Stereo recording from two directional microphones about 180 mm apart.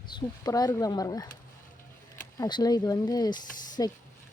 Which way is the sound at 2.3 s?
20° left (ahead or behind).